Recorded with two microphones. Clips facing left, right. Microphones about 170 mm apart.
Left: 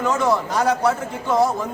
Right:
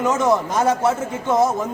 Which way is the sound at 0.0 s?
20° right (ahead or behind).